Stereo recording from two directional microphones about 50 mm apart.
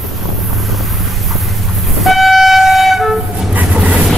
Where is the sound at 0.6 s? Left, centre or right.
Centre.